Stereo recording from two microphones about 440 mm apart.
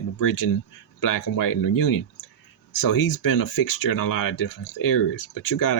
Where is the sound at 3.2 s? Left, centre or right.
Left.